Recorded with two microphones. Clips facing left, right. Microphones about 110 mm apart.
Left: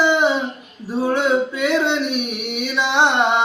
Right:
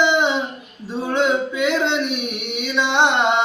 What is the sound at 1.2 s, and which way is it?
Male singing, 15° right (ahead or behind).